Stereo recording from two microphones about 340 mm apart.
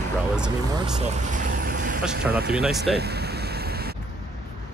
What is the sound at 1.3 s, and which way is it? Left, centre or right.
Vehicle, right.